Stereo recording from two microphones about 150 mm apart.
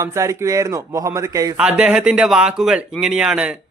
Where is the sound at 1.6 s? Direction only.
5° right (ahead or behind).